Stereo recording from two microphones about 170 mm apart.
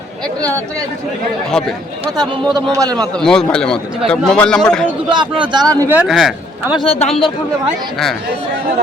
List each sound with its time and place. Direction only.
2.1 s speech: 25° right (ahead or behind)
3.2 s speech: 5° left (ahead or behind)
5.0 s speech: 25° right (ahead or behind)
5.9 s speech: 5° right (ahead or behind)
6.7 s a man's voice: 35° left (ahead or behind)